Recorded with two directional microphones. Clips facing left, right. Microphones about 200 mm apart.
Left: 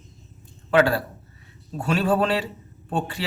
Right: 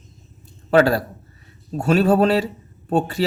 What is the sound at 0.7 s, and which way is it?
Speech, 40° right (ahead or behind).